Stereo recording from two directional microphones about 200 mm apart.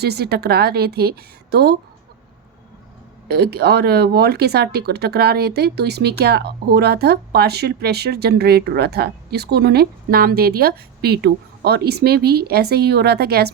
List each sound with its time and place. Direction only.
0.0 s speech: 55° right (ahead or behind)
3.2 s speech: 55° right (ahead or behind)